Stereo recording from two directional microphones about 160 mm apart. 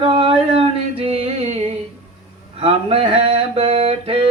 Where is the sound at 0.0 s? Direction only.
30° right (ahead or behind).